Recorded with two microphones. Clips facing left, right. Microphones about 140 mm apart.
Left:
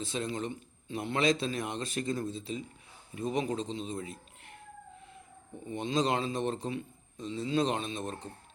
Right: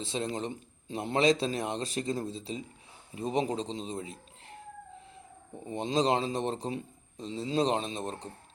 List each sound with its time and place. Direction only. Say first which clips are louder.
0.0 s speech: right 1 dB; 30° right (ahead or behind)
5.6 s speech: right 2 dB; 35° right (ahead or behind)